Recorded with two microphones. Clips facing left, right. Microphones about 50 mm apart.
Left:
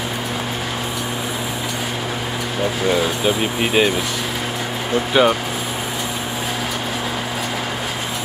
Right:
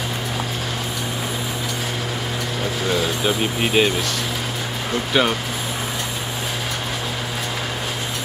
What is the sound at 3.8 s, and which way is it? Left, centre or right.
Speech, centre.